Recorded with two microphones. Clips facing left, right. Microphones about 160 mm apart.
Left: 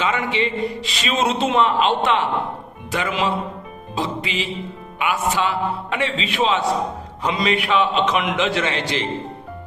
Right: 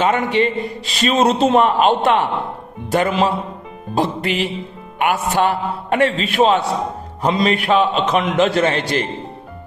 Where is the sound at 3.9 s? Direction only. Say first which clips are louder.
Right 6 dB; 60° right (ahead or behind).